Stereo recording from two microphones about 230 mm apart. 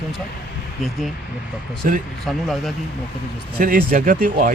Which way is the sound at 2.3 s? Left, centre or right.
Centre.